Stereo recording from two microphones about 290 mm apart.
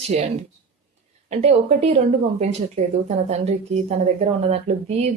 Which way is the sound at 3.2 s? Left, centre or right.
Right.